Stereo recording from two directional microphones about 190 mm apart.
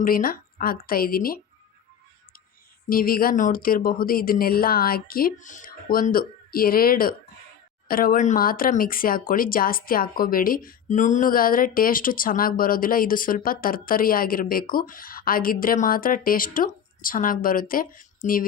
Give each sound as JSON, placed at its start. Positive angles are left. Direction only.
{"t": 0.0, "sound": "speech", "side_deg": 50}
{"t": 2.9, "sound": "speech", "side_deg": 50}